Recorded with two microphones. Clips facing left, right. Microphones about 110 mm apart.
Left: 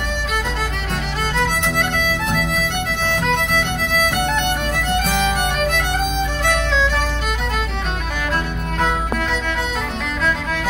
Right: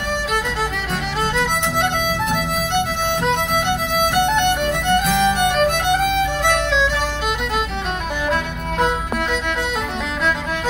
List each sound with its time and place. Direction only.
1.3 s violin: 15° right (ahead or behind)
5.7 s music: 20° right (ahead or behind)